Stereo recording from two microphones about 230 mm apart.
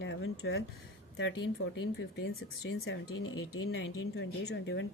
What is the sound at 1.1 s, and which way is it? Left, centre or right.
Speech, left.